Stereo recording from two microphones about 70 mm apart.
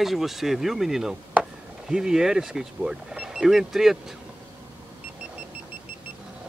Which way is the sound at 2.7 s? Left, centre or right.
Centre.